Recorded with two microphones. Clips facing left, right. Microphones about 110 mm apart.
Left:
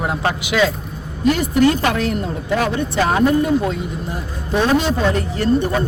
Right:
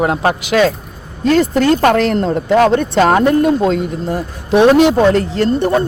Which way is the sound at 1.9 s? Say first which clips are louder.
Right 8 dB; 90° right.